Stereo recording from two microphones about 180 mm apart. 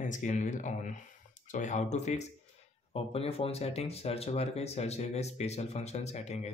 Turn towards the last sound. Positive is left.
turn(degrees=35)  # may be behind; listen again after turning